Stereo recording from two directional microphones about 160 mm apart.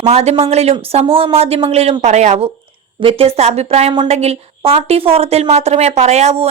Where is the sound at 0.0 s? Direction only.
40° right (ahead or behind).